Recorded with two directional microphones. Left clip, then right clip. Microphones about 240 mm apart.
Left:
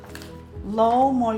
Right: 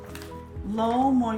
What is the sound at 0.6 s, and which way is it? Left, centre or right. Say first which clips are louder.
Music: left 6 dB; left.